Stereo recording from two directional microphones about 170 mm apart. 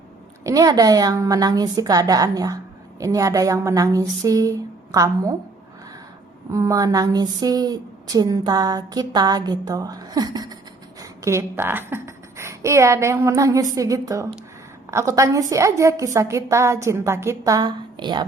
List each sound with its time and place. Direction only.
0.4 s a woman's voice: 20° right (ahead or behind)
6.5 s a woman's voice: 20° right (ahead or behind)